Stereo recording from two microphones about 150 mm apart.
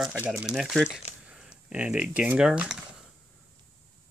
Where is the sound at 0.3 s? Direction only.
5° right (ahead or behind).